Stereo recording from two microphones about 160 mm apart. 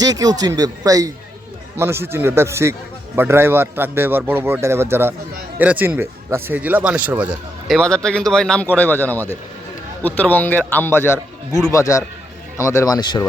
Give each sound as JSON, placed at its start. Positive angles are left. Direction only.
{"t": 0.0, "sound": "speech", "side_deg": -25}
{"t": 7.8, "sound": "speech", "side_deg": 5}